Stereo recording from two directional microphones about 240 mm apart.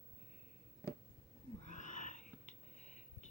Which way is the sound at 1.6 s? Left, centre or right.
Left.